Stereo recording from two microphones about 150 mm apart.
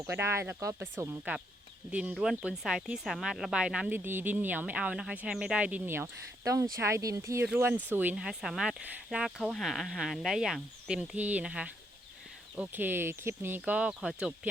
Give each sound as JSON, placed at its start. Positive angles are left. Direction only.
{"t": 0.0, "sound": "speech", "side_deg": -15}